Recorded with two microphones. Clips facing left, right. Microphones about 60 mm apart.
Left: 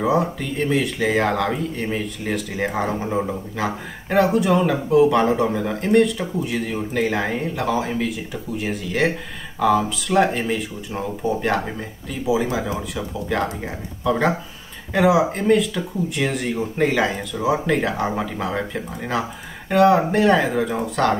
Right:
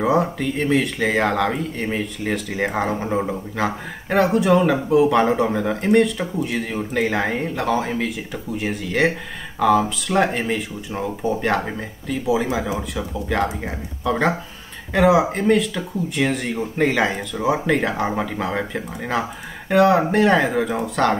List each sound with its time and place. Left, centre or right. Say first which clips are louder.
0.0 s speech: right 1 dB; centre